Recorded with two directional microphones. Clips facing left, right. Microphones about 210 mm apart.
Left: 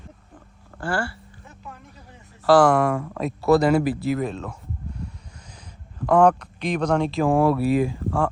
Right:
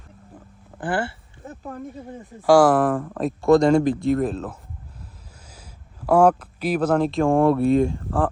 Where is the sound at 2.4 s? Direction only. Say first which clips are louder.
Right 1 dB; 10° right (ahead or behind).